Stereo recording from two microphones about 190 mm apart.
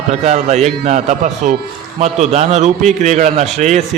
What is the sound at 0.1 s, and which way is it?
A man's voice, 35° right (ahead or behind).